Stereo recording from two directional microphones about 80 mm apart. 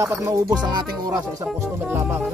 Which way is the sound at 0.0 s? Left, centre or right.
Right.